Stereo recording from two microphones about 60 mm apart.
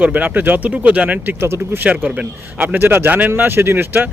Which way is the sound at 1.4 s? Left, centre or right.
Right.